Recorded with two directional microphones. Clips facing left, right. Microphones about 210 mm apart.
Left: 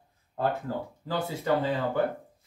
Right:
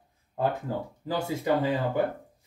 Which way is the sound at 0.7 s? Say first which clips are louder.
Right 1 dB; 15° right (ahead or behind).